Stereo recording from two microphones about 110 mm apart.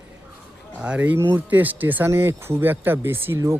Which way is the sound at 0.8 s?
10° right (ahead or behind).